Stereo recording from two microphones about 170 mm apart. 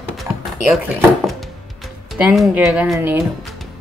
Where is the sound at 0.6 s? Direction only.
Centre (ahead or behind).